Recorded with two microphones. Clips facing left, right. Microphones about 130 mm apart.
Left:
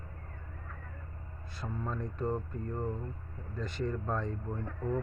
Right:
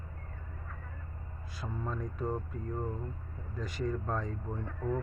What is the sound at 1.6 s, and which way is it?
Speech, 5° right (ahead or behind).